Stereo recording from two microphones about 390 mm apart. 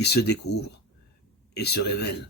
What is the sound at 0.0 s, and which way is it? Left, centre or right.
Speech, left.